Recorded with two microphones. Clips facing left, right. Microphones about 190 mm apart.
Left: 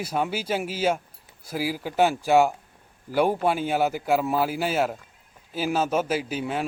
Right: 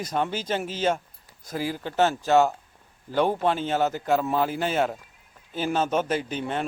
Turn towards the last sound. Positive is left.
turn(degrees=5)  # may be behind; listen again after turning